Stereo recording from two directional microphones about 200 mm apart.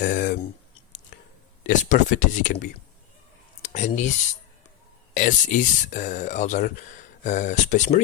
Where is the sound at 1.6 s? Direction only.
40° left (ahead or behind).